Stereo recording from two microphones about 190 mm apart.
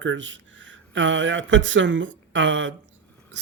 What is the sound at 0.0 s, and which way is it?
Speech, 80° right.